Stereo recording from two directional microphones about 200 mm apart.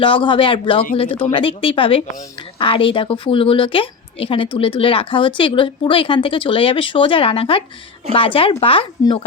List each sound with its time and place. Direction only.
0.0 s speech: 25° left (ahead or behind)